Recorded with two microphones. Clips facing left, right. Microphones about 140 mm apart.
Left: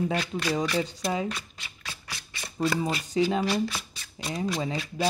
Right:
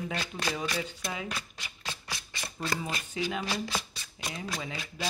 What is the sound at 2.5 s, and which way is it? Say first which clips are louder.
Speech: left 8 dB; 40° left (ahead or behind).